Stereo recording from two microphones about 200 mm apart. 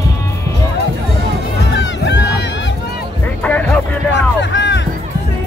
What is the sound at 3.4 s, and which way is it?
Music, 10° left (ahead or behind).